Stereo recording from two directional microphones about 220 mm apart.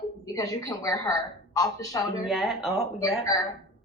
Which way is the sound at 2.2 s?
Centre (ahead or behind).